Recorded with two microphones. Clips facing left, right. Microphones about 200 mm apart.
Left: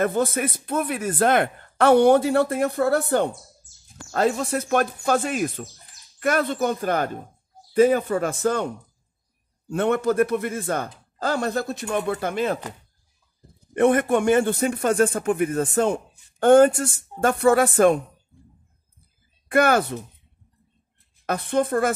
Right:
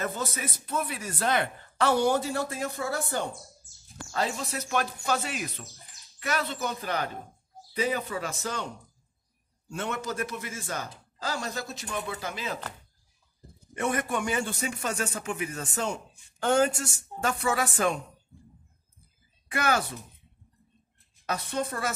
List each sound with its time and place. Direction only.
0.0 s speech: 55° left (ahead or behind)
13.7 s speech: 55° left (ahead or behind)
19.5 s speech: 55° left (ahead or behind)
21.3 s speech: 55° left (ahead or behind)